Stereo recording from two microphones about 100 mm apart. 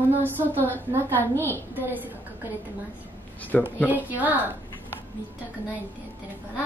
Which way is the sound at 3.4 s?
15° left (ahead or behind).